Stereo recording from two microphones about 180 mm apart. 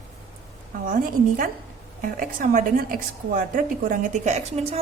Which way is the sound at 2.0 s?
50° right (ahead or behind).